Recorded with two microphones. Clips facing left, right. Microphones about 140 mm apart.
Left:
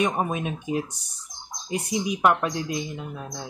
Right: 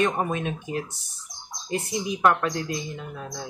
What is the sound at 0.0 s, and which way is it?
Speech, 10° left (ahead or behind).